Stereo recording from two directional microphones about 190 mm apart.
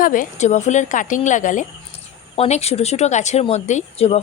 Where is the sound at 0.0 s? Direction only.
45° left (ahead or behind).